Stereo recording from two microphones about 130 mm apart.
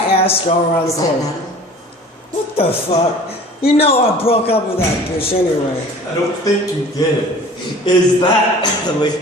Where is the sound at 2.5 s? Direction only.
50° left (ahead or behind).